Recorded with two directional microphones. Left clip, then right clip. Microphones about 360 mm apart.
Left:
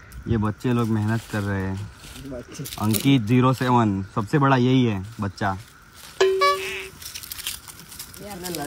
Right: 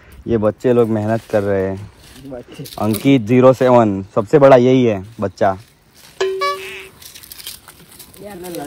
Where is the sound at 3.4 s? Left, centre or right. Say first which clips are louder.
Right 14 dB; right.